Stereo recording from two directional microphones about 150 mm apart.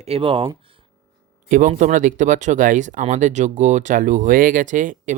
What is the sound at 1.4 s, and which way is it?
Speech, 60° right (ahead or behind).